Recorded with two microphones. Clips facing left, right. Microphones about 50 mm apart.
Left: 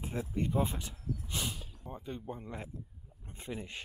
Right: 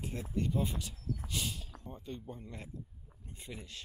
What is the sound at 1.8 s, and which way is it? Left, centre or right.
Speech, centre.